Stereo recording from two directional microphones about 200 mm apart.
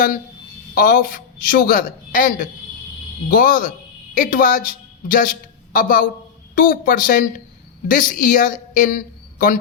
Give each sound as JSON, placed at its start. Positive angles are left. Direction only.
{"t": 0.7, "sound": "a woman's voice", "side_deg": 45}